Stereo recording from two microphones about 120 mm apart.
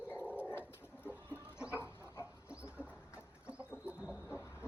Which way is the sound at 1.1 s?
15° right (ahead or behind).